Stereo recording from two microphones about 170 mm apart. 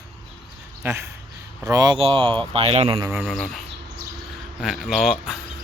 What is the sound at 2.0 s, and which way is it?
Speech, 35° right (ahead or behind).